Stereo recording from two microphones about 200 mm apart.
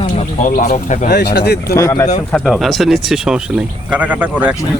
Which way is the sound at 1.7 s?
15° left (ahead or behind).